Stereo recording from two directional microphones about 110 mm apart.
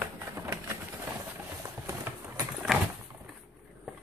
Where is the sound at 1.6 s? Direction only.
30° right (ahead or behind).